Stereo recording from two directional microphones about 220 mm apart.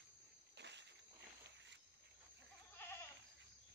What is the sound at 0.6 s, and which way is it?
Walk, 50° right (ahead or behind).